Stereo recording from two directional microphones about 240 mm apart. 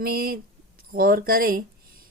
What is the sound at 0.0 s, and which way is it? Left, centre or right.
A woman's voice, right.